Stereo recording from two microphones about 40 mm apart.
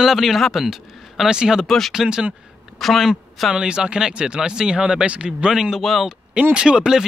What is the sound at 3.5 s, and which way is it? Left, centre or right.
Speech, right.